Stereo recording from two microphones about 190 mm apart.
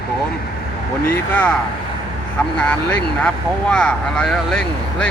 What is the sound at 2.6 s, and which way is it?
Speech, 5° left (ahead or behind).